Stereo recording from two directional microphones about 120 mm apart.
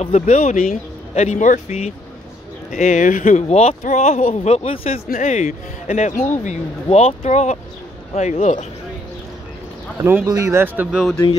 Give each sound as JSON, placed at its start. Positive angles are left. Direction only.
{"t": 0.0, "sound": "speech", "side_deg": 65}
{"t": 2.7, "sound": "speech", "side_deg": 90}
{"t": 5.2, "sound": "speech", "side_deg": 85}
{"t": 10.2, "sound": "speech", "side_deg": -30}
{"t": 10.9, "sound": "speech", "side_deg": -5}